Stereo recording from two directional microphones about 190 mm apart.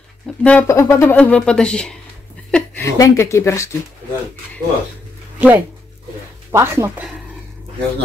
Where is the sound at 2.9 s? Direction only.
15° left (ahead or behind).